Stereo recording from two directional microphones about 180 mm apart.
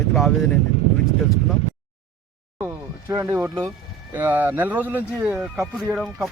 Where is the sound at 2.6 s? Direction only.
15° right (ahead or behind).